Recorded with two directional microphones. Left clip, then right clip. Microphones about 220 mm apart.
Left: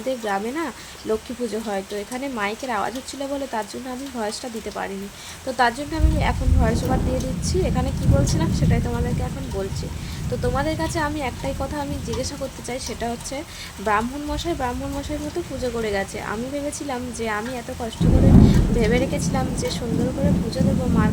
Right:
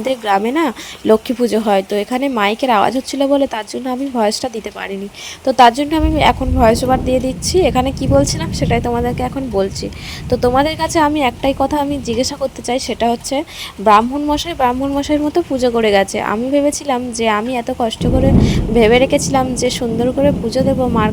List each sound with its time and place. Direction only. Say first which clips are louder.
0.3 s a woman's voice: right 10 dB; 30° right (ahead or behind)
5.5 s a woman's voice: right 11 dB; 30° right (ahead or behind)
10.4 s a woman's voice: right 9 dB; 30° right (ahead or behind)